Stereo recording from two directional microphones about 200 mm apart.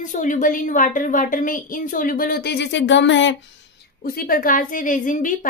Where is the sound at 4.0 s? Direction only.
45° left (ahead or behind).